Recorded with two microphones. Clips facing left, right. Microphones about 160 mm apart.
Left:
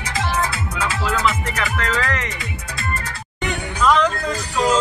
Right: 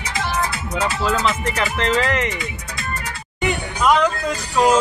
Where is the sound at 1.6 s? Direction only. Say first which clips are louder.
Right 4 dB; 20° right (ahead or behind).